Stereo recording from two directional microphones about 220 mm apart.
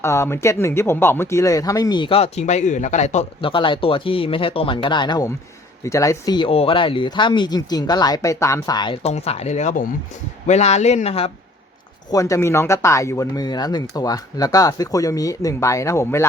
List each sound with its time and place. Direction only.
0.0 s speech: 10° left (ahead or behind); by 11.3 s 30° left (ahead or behind)
12.1 s speech: 15° left (ahead or behind)